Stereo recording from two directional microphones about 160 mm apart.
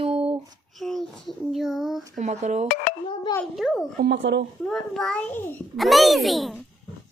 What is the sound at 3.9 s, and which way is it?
Speech, 90° right.